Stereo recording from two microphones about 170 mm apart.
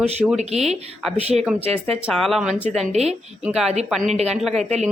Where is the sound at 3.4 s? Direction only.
Centre (ahead or behind).